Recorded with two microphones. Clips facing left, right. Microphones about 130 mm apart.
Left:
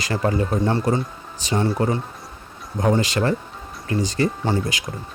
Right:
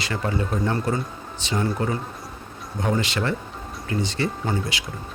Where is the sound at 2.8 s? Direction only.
40° left (ahead or behind).